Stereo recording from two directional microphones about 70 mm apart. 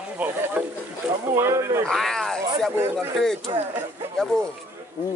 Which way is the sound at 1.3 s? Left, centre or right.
Right.